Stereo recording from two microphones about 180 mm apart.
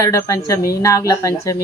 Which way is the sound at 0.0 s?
15° left (ahead or behind).